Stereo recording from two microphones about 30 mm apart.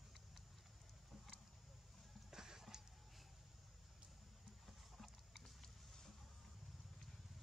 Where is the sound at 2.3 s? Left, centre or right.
Centre.